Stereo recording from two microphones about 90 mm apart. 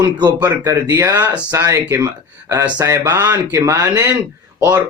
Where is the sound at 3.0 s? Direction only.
40° right (ahead or behind).